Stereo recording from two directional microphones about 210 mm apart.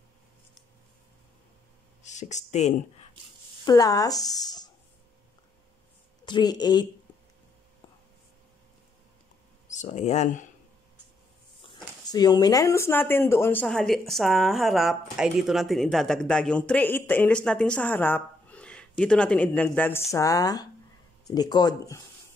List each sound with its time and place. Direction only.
2.0 s speech: 35° left (ahead or behind)
3.6 s speech: 15° left (ahead or behind)
6.2 s speech: 20° left (ahead or behind)
9.7 s speech: 35° left (ahead or behind)
11.6 s speech: 20° left (ahead or behind)